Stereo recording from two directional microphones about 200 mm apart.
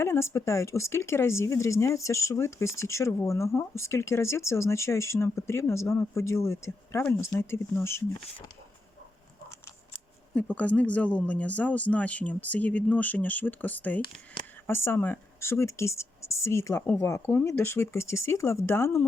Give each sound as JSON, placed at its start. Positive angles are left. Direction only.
{"t": 0.0, "sound": "speech", "side_deg": 15}
{"t": 10.3, "sound": "speech", "side_deg": 5}
{"t": 14.4, "sound": "a sound", "side_deg": 25}
{"t": 14.7, "sound": "speech", "side_deg": 10}